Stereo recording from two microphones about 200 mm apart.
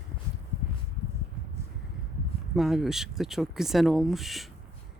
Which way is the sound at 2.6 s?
Centre (ahead or behind).